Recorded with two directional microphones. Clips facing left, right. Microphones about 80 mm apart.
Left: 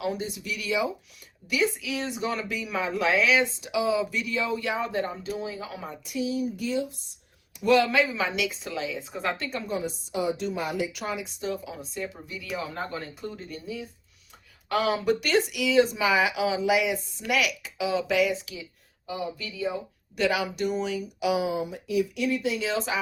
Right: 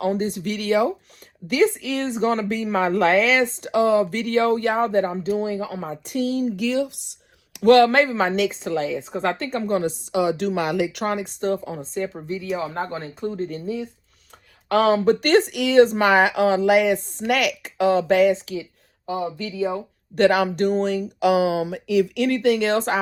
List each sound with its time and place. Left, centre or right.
0.0 s speech: right
6.1 s speech: right
8.1 s speech: right
9.6 s speech: right
10.1 s speech: right
11.9 s speech: right
18.3 s speech: right
20.1 s speech: right